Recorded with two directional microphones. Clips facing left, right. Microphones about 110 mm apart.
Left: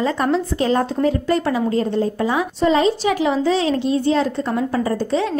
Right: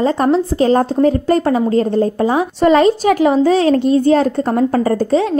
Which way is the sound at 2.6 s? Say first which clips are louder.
Right 6 dB; 60° right (ahead or behind).